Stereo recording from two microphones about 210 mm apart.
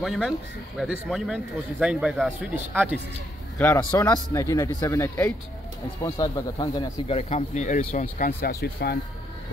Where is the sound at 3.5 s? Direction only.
10° left (ahead or behind); by 8.9 s 45° left (ahead or behind).